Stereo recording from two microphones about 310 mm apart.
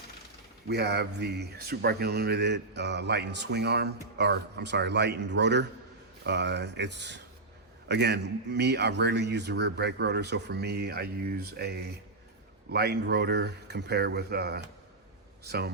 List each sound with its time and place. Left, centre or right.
0.7 s speech: right